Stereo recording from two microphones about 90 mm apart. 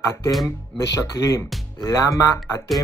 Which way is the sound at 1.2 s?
30° left (ahead or behind).